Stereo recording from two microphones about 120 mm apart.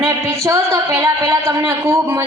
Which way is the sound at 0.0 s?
25° right (ahead or behind).